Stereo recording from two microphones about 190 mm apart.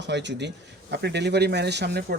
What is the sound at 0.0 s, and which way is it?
Speech, 65° right (ahead or behind).